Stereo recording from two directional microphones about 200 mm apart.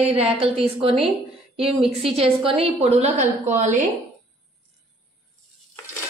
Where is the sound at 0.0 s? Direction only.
30° right (ahead or behind).